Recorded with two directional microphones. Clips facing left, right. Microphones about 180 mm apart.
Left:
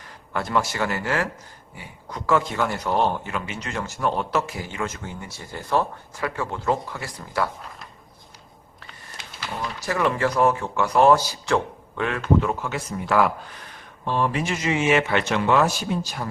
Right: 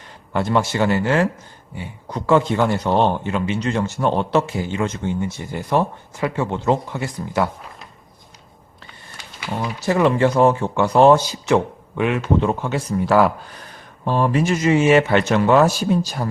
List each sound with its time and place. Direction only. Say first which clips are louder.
0.3 s speech: right 5 dB; 25° right (ahead or behind)
9.8 s speech: right 6 dB; 25° right (ahead or behind)
12.4 s speech: right 5 dB; 30° right (ahead or behind)